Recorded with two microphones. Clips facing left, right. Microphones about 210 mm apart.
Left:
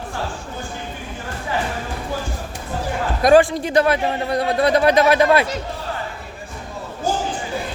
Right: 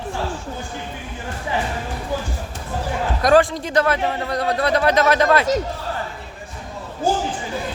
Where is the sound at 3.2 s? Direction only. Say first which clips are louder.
Left 3 dB; 15° left (ahead or behind).